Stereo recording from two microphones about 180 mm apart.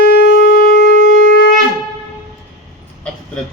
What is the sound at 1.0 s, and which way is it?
Wind instrument, 45° right (ahead or behind).